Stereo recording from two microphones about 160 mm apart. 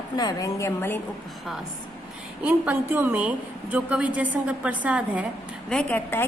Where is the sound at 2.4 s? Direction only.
10° right (ahead or behind).